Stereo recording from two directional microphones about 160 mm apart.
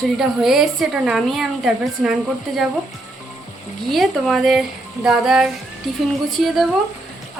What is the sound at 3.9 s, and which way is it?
A woman's voice, centre (ahead or behind).